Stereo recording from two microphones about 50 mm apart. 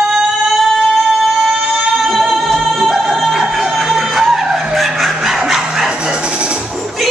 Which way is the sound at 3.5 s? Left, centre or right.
Centre.